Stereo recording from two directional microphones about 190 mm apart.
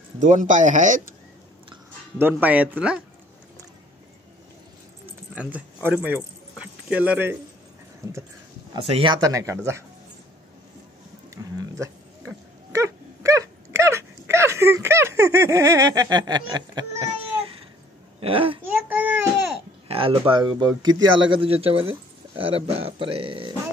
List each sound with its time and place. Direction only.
0.2 s speech: 40° right (ahead or behind)
2.1 s speech: 10° right (ahead or behind)
5.0 s keys jangling: 5° right (ahead or behind)
8.0 s speech: 15° right (ahead or behind)
8.8 s speech: 25° right (ahead or behind)
11.2 s a sound: 15° right (ahead or behind)
12.7 s dog: 15° right (ahead or behind)
18.2 s speech: 30° right (ahead or behind)
18.9 s baby cry: 10° right (ahead or behind)
19.9 s speech: 30° right (ahead or behind)